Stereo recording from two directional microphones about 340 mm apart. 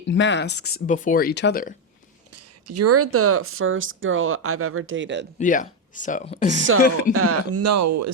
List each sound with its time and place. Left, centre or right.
0.1 s speech: left
2.3 s speech: right
5.4 s speech: left
7.1 s speech: right